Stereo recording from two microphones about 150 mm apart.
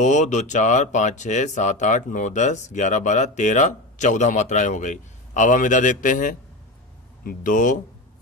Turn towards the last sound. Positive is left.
turn(degrees=60)  # may be behind; listen again after turning